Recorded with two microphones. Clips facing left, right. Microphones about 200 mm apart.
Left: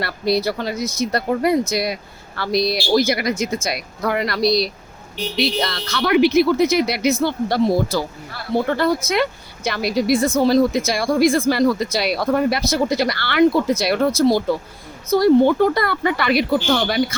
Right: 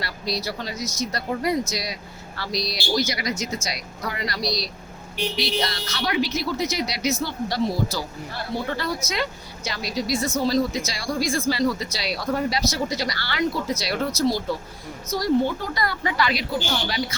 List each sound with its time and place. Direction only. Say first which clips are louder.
0.0 s a woman's voice: left 9 dB; 55° left (ahead or behind)